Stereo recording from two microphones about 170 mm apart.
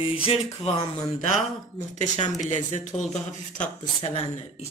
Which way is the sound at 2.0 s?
45° left (ahead or behind).